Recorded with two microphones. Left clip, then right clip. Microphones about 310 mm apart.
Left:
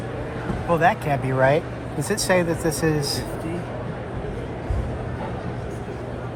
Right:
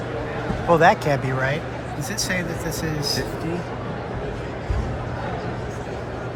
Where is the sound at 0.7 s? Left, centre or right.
Centre.